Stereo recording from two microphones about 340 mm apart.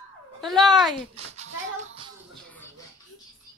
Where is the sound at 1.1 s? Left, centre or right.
Centre.